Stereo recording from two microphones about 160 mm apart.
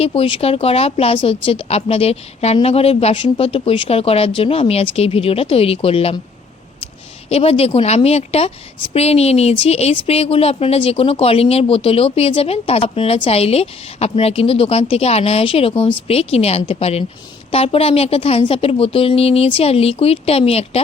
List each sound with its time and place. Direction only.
0.0 s a woman's voice: 35° left (ahead or behind)
7.3 s a woman's voice: 40° left (ahead or behind)